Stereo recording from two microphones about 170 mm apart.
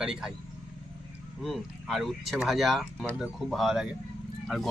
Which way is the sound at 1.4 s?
Centre (ahead or behind).